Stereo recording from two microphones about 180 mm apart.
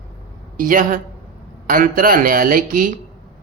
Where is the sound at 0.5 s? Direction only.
50° right (ahead or behind).